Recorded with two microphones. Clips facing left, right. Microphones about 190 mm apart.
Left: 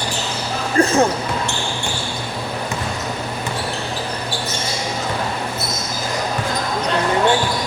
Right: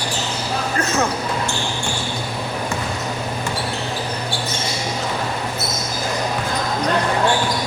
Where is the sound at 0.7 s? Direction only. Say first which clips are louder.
Left 8 dB; 30° left (ahead or behind).